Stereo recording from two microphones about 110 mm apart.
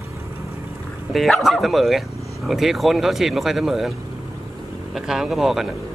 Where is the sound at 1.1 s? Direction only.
Centre (ahead or behind).